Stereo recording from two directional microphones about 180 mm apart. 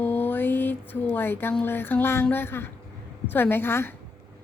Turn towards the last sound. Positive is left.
turn(degrees=10)  # may be behind; listen again after turning